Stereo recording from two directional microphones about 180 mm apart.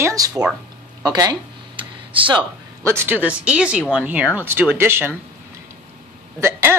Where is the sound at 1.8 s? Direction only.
30° right (ahead or behind).